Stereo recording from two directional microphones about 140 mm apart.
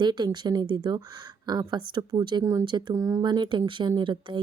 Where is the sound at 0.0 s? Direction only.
30° right (ahead or behind).